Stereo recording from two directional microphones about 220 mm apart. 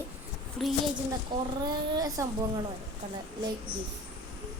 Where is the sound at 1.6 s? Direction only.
15° right (ahead or behind).